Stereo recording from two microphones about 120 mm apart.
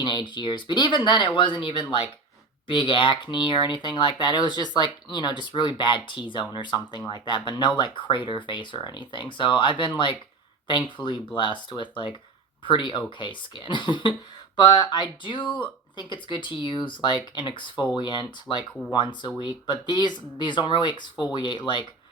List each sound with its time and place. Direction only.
0.0 s speech: 40° left (ahead or behind)